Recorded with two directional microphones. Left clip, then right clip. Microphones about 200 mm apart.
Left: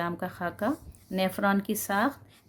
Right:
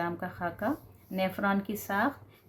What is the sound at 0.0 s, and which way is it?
A woman's voice, 50° left (ahead or behind).